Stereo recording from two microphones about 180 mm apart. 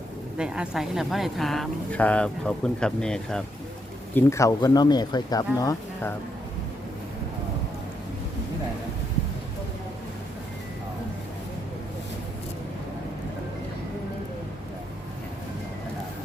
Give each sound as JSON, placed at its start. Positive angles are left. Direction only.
{"t": 0.3, "sound": "speech", "side_deg": -5}
{"t": 4.1, "sound": "speech", "side_deg": 15}